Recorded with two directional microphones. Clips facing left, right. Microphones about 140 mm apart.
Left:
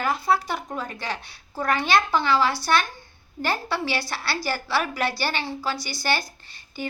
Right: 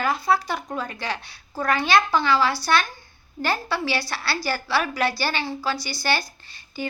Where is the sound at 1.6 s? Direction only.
20° left (ahead or behind).